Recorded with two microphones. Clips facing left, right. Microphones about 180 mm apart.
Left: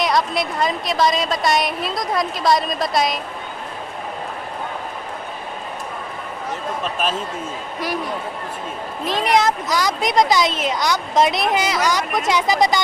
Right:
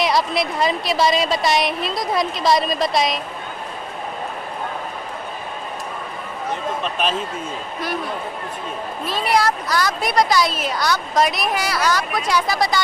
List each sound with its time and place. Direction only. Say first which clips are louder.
0.0 s a woman's voice: even; centre (ahead or behind)
9.0 s speech: left 2 dB; 15° left (ahead or behind)